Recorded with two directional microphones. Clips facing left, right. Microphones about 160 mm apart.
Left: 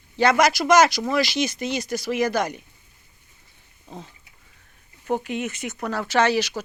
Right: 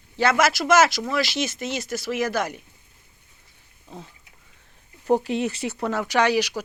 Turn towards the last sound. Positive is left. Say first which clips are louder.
# even
turn(degrees=-10)  # may be behind; listen again after turning